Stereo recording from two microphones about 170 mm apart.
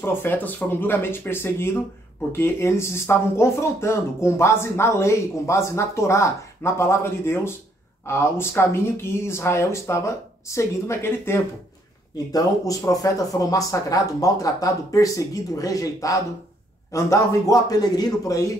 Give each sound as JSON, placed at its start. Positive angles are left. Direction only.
{"t": 0.0, "sound": "speech", "side_deg": 10}